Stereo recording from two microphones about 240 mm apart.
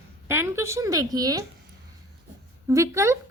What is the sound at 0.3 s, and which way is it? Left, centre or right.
A woman's voice, centre.